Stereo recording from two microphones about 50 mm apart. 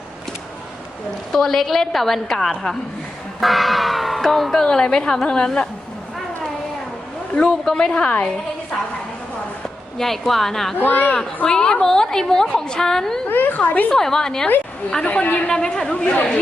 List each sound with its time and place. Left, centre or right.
1.3 s a woman's voice: centre
7.4 s a woman's voice: centre
10.0 s a woman's voice: centre
10.8 s a woman's voice: left
11.4 s a woman's voice: centre
13.2 s a woman's voice: left
13.9 s a woman's voice: centre
16.0 s speech: left